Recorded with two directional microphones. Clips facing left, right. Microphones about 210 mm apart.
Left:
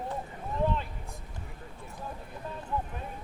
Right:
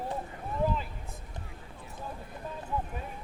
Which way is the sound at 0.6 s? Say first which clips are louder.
Even; 5° right (ahead or behind).